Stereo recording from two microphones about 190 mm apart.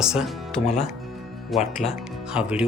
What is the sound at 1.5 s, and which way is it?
Speech, centre (ahead or behind).